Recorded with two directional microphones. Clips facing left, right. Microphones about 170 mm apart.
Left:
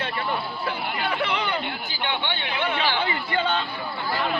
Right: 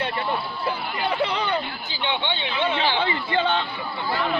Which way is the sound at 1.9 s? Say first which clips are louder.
Right 4 dB; 20° right (ahead or behind).